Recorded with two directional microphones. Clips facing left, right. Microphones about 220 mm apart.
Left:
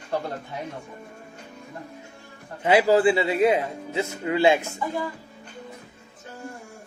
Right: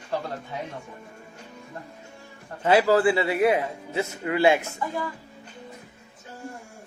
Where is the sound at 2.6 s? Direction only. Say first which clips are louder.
Left 1 dB; 15° left (ahead or behind).